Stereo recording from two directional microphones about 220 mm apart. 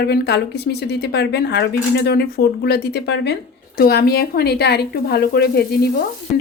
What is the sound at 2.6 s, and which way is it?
A woman's voice, 45° left (ahead or behind).